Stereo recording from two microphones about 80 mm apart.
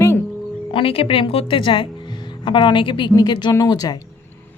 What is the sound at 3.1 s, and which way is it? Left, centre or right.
Speech, left.